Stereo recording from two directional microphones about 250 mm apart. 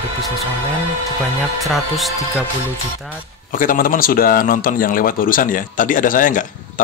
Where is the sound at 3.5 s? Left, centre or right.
Left.